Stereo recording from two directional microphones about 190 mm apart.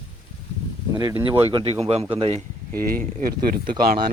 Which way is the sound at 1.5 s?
30° right (ahead or behind).